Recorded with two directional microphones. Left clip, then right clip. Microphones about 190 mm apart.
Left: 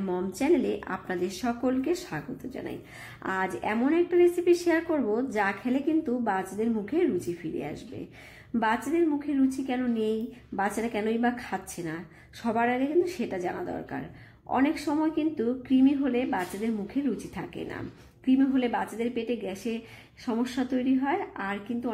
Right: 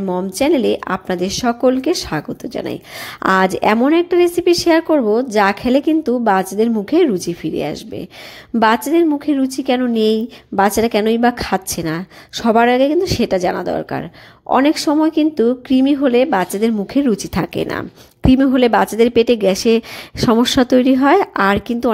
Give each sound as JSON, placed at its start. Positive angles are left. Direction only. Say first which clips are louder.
{"t": 0.0, "sound": "a woman's voice", "louder": "right 12 dB", "side_deg": -35}
{"t": 8.5, "sound": "a woman's voice", "louder": "right 13 dB", "side_deg": -40}